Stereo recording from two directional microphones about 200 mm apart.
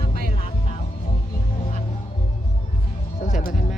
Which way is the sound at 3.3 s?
40° left (ahead or behind).